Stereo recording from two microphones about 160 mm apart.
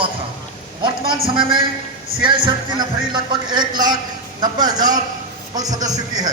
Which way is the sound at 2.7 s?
30° right (ahead or behind).